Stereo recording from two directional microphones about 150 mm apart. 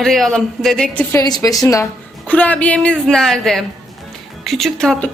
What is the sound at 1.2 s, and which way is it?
Speech, 25° left (ahead or behind).